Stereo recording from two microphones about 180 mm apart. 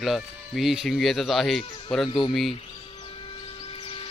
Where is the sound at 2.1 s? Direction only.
25° left (ahead or behind).